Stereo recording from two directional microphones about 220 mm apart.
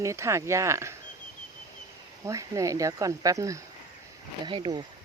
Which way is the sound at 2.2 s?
15° right (ahead or behind).